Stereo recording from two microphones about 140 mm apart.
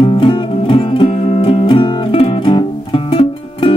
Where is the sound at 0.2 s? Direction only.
40° left (ahead or behind).